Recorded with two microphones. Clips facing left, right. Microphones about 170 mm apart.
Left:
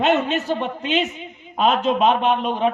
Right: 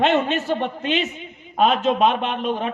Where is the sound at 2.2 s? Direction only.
45° left (ahead or behind).